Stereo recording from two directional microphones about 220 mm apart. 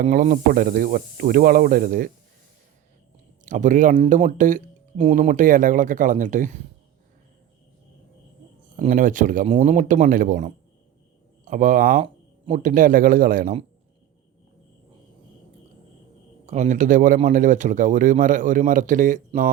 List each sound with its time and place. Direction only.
0.0 s speech: 40° right (ahead or behind)
3.4 s speech: 35° right (ahead or behind)
8.7 s speech: 35° right (ahead or behind)
16.5 s speech: 35° right (ahead or behind)